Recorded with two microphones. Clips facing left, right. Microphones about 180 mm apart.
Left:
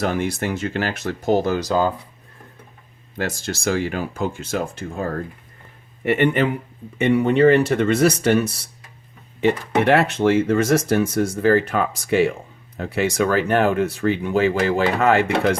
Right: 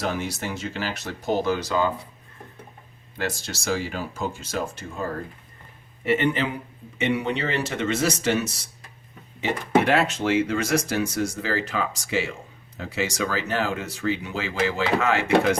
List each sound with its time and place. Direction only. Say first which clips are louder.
0.0 s speech: left 6 dB; 55° left (ahead or behind); by 1.9 s 40° left (ahead or behind)
3.2 s speech: left 4 dB; 50° left (ahead or behind)
6.1 s speech: left 4 dB; 60° left (ahead or behind)